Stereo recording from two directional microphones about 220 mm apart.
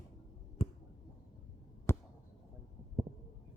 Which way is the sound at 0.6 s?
25° left (ahead or behind).